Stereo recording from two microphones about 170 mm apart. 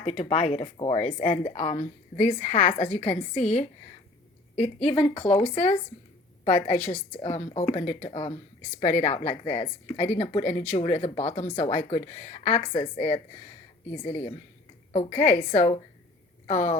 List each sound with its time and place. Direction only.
0.0 s a woman's voice: 40° left (ahead or behind)